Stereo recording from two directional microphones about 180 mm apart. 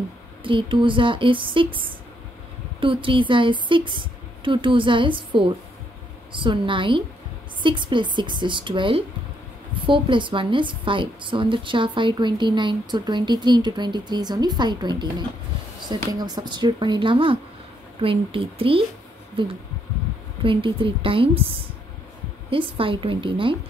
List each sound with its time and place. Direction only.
0.4 s a woman's voice: 25° right (ahead or behind)
2.8 s a woman's voice: 30° right (ahead or behind)
22.5 s a woman's voice: 30° right (ahead or behind)